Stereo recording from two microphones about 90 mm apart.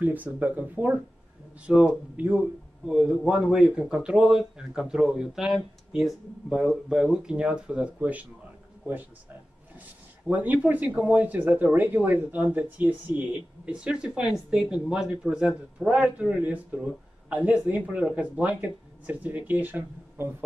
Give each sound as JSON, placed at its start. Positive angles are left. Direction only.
{"t": 0.0, "sound": "a man's voice", "side_deg": -20}
{"t": 9.8, "sound": "a man's voice", "side_deg": -20}